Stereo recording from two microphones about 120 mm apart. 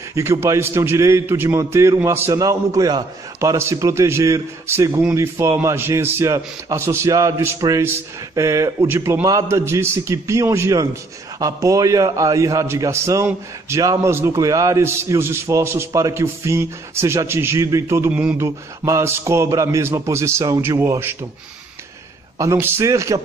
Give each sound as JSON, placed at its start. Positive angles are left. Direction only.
{"t": 0.1, "sound": "a man's voice", "side_deg": -25}
{"t": 22.4, "sound": "a man's voice", "side_deg": -25}